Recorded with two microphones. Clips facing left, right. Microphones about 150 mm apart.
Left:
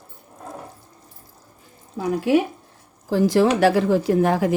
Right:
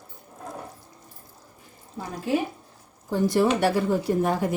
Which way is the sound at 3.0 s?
90° left.